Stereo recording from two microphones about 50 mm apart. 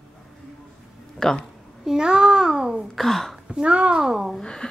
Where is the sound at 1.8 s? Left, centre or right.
Centre.